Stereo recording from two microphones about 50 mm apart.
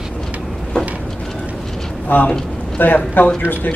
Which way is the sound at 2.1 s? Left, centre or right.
Left.